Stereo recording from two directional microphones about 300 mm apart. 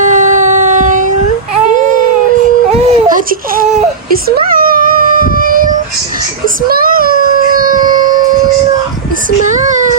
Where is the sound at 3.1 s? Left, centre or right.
Right.